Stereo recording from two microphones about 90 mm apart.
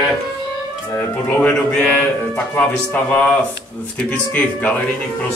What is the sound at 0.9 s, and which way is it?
A man's voice, 20° left (ahead or behind).